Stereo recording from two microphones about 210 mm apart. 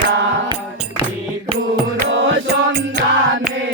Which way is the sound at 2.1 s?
65° right (ahead or behind).